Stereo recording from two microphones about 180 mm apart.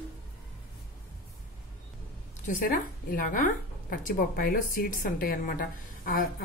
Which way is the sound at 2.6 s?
50° left (ahead or behind).